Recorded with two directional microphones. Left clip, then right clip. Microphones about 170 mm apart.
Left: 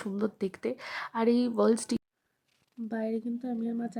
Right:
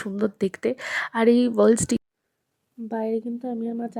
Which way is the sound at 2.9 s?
5° right (ahead or behind).